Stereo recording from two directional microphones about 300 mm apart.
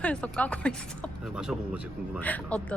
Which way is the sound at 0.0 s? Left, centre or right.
Centre.